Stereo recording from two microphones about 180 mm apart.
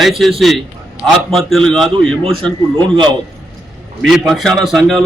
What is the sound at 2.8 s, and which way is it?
Speech, 25° right (ahead or behind).